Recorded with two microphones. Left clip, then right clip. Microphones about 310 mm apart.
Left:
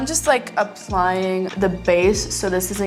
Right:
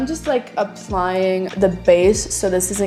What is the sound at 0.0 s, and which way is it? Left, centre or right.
Speech, left.